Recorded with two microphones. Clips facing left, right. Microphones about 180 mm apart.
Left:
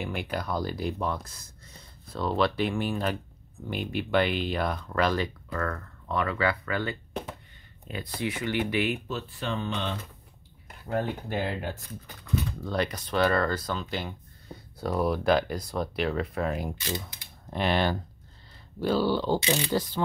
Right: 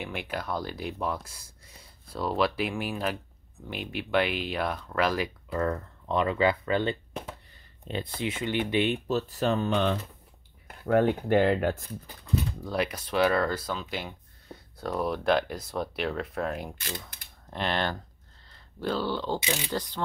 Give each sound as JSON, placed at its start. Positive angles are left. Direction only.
{"t": 0.0, "sound": "speech", "side_deg": 0}
{"t": 5.5, "sound": "speech", "side_deg": -20}
{"t": 10.9, "sound": "speech", "side_deg": -65}
{"t": 12.5, "sound": "speech", "side_deg": -10}